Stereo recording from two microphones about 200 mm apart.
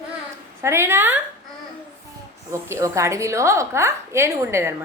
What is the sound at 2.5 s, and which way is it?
A woman's voice, 15° right (ahead or behind).